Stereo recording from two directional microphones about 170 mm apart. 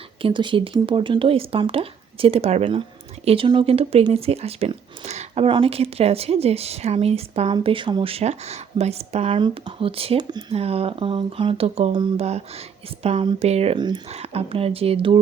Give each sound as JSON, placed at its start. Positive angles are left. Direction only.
{"t": 0.2, "sound": "a woman's voice", "side_deg": -30}
{"t": 13.7, "sound": "speech", "side_deg": -25}
{"t": 14.1, "sound": "a woman's voice", "side_deg": -35}